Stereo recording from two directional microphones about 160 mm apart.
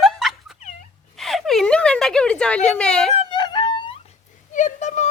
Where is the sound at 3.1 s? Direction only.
30° left (ahead or behind).